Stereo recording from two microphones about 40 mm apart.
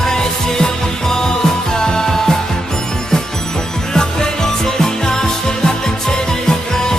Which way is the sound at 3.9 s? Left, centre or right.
Centre.